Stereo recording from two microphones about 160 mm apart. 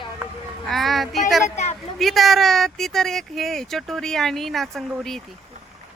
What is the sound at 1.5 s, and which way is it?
Speech, 45° left (ahead or behind).